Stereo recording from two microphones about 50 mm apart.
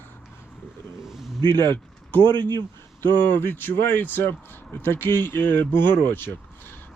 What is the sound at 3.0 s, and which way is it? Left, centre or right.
Speech, left.